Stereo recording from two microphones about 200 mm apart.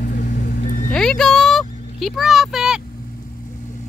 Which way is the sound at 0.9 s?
Centre (ahead or behind).